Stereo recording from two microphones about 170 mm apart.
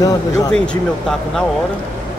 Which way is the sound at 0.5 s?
5° left (ahead or behind).